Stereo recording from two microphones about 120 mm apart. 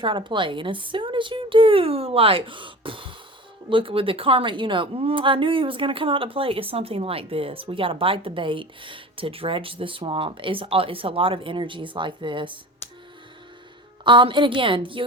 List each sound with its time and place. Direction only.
0.0 s a woman's voice: 45° right (ahead or behind)
14.0 s a woman's voice: 40° right (ahead or behind)